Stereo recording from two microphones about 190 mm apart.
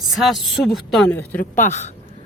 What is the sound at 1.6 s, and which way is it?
Speech, 40° left (ahead or behind).